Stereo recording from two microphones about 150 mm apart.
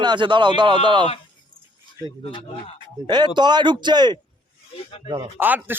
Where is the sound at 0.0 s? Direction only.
30° right (ahead or behind).